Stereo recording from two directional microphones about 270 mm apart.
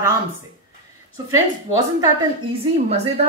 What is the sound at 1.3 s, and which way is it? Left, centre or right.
Speech, centre.